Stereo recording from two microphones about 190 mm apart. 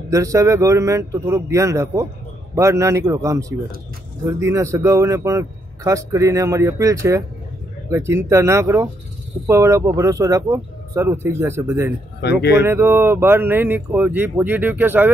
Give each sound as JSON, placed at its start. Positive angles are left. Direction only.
{"t": 0.1, "sound": "speech", "side_deg": -15}
{"t": 12.2, "sound": "speech", "side_deg": 60}
{"t": 12.5, "sound": "speech", "side_deg": -10}